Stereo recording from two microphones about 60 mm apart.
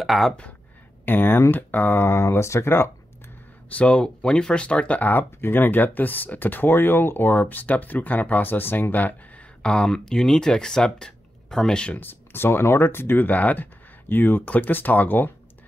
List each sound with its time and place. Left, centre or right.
0.0 s speech: centre
1.0 s speech: left
3.7 s speech: centre
9.6 s speech: centre
11.9 s speech: left